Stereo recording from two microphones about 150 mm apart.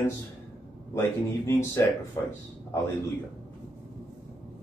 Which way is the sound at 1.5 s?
15° left (ahead or behind).